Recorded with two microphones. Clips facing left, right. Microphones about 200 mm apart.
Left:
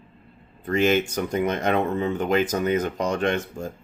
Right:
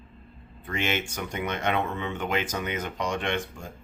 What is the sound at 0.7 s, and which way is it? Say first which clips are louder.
Speech: left 9 dB; 40° left (ahead or behind).